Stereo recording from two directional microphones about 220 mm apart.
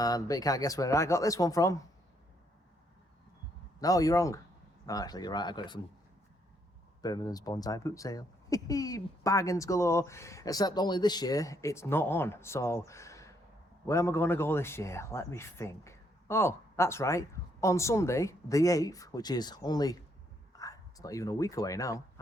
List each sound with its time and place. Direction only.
0.0 s speech: 15° left (ahead or behind)
3.8 s speech: 15° left (ahead or behind)
7.0 s speech: 15° left (ahead or behind)